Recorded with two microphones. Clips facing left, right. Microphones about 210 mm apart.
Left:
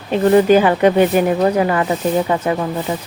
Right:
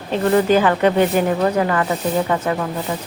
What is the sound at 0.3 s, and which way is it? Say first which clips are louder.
Speech: left 3 dB; 15° left (ahead or behind).